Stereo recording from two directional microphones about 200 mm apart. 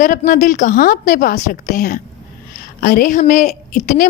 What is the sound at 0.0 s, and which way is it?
A woman's voice, 40° left (ahead or behind).